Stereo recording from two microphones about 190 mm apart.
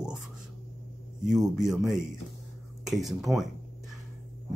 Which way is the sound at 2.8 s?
Centre (ahead or behind).